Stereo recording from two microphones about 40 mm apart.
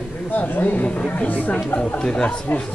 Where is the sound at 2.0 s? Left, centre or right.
Left.